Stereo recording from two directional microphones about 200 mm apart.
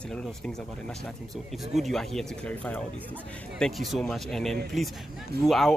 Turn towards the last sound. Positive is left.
turn(degrees=0)  # may be behind; listen again after turning